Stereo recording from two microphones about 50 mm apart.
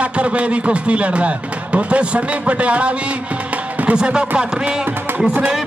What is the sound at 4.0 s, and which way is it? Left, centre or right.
Speech, centre.